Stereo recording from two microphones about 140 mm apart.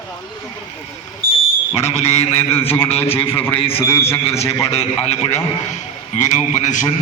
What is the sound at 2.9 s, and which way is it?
Speech, 45° left (ahead or behind).